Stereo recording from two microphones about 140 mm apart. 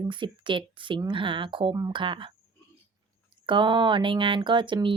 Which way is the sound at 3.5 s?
35° right (ahead or behind).